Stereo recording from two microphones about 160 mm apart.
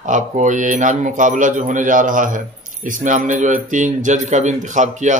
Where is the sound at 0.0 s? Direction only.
50° right (ahead or behind).